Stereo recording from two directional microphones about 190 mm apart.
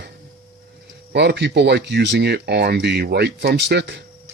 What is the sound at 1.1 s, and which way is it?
Speech, 65° right (ahead or behind).